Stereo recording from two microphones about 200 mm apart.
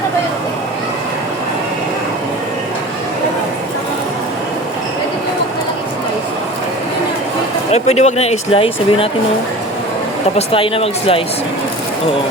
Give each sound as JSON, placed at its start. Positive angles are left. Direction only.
{"t": 7.7, "sound": "speech", "side_deg": 35}
{"t": 10.3, "sound": "speech", "side_deg": 30}